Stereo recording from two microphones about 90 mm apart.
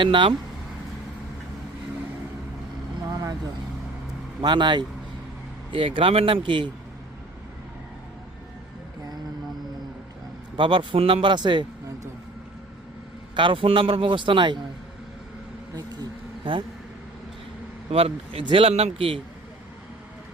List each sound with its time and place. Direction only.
0.0 s a man's voice: 70° right (ahead or behind)
3.1 s vehicle: 40° right (ahead or behind)
4.4 s speech: 60° right (ahead or behind)
5.7 s a man's voice: 75° right (ahead or behind)
10.6 s speech: 65° right (ahead or behind)
13.3 s a man's voice: 70° right (ahead or behind)
15.7 s a sound: 45° right (ahead or behind)
17.9 s a man's voice: 90° right